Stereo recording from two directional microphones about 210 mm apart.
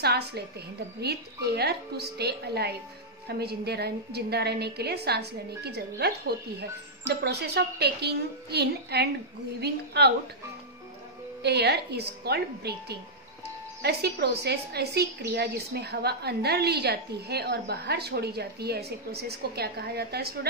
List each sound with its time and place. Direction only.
0.0 s a woman's voice: 50° right (ahead or behind)
11.4 s a woman's voice: 50° right (ahead or behind)